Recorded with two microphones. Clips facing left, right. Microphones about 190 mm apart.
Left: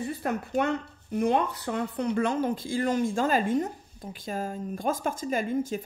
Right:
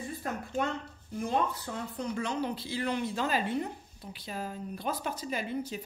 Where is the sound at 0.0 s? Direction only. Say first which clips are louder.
Left 6 dB; 70° left (ahead or behind).